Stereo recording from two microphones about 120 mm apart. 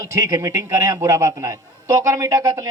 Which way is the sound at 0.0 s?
25° right (ahead or behind).